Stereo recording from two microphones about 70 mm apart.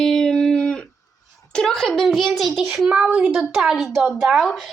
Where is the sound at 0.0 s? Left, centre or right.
Centre.